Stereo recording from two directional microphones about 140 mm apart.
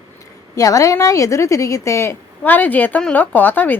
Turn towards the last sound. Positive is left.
turn(degrees=15)  # may be behind; listen again after turning